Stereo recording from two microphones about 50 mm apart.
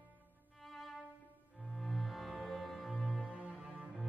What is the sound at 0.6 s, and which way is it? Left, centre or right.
Violin, centre.